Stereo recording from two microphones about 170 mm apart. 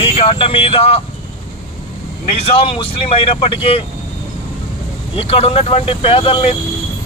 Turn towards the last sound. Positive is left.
turn(degrees=35)  # may be behind; listen again after turning